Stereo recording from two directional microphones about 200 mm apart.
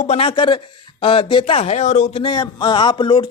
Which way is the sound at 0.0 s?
30° left (ahead or behind).